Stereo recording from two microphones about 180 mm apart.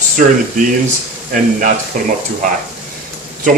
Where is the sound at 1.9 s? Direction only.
50° right (ahead or behind).